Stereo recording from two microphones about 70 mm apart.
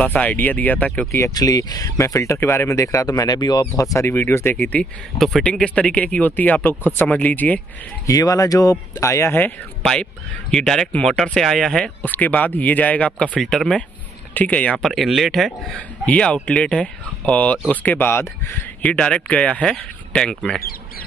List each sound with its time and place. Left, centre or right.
0.0 s speech: left
1.3 s speech: left
3.0 s speech: left
3.7 s speech: left
4.1 s speech: left
5.4 s speech: centre
8.1 s speech: left
10.5 s speech: centre
11.8 s speech: left
13.4 s speech: centre
14.3 s speech: left
14.8 s speech: centre
16.1 s speech: centre
18.8 s speech: centre